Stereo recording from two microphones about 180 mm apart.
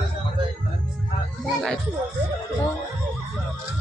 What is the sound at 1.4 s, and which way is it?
Music, centre (ahead or behind).